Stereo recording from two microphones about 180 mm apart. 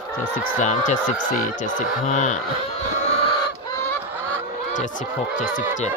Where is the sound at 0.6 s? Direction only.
45° left (ahead or behind).